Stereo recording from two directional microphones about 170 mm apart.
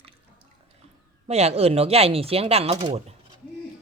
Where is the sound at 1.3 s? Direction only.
40° right (ahead or behind).